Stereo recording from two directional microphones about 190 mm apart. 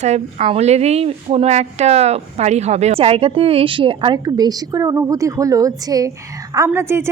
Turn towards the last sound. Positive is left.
turn(degrees=-10)  # may be behind; listen again after turning